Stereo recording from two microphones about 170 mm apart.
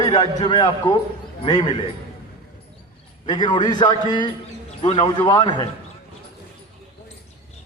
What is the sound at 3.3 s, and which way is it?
A man's voice, 25° left (ahead or behind).